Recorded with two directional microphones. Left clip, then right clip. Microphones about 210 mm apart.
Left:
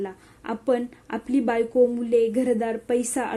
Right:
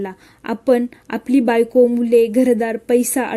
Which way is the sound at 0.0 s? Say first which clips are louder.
Right 5 dB; 40° right (ahead or behind).